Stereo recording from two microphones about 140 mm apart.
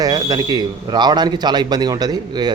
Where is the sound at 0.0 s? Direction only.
30° right (ahead or behind).